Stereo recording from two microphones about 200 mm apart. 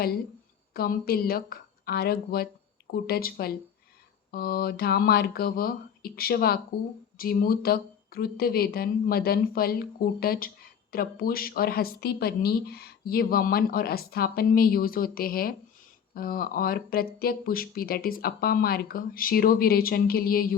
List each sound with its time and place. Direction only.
0.7 s speech: 50° left (ahead or behind)